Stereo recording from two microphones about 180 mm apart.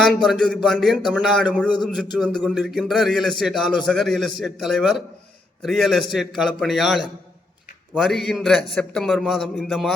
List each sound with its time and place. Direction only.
0.0 s a man's voice: centre (ahead or behind)